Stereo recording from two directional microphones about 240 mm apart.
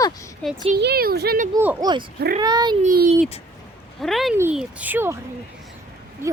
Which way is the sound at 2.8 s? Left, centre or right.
Right.